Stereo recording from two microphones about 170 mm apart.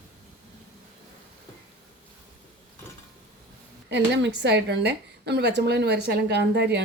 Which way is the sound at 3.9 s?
90° right.